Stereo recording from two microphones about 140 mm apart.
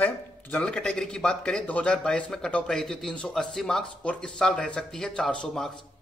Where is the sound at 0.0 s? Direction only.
10° left (ahead or behind).